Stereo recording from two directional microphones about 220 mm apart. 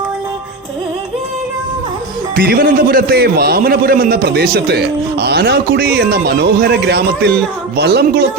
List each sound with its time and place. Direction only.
2.3 s a man's voice: 45° right (ahead or behind)